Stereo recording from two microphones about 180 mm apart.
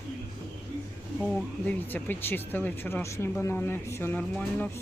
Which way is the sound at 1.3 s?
10° left (ahead or behind).